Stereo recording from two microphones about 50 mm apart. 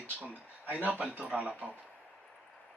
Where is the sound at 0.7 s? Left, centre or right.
Right.